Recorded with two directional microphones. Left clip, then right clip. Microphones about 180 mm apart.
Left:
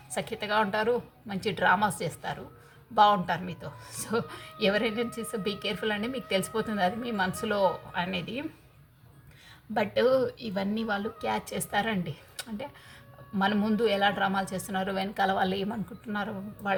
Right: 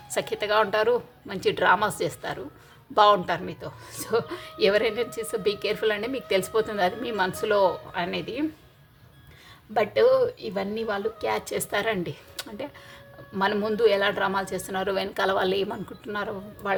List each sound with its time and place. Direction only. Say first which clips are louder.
0.1 s speech: right 5 dB; 50° right (ahead or behind)
9.7 s speech: right 5 dB; 40° right (ahead or behind)
11.2 s speech: right 4 dB; 45° right (ahead or behind)